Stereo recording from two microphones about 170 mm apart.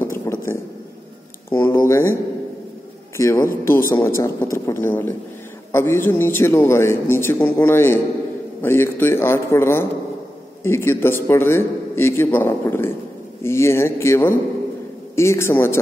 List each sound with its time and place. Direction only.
0.0 s a sound: 15° left (ahead or behind)
1.5 s speech: 15° left (ahead or behind)
3.2 s a man's voice: 15° left (ahead or behind)